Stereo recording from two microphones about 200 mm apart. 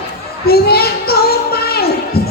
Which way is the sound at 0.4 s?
50° left (ahead or behind).